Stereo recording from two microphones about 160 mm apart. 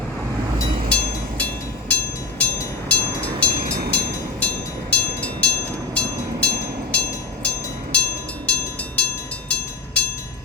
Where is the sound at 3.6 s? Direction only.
70° right (ahead or behind).